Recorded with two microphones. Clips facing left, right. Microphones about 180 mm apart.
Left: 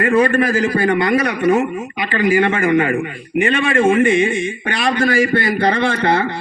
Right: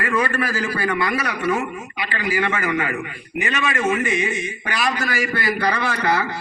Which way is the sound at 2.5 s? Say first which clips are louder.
Left 8 dB; 25° left (ahead or behind).